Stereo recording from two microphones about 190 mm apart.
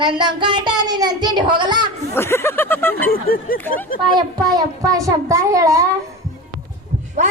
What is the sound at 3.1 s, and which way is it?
Speech, 50° left (ahead or behind).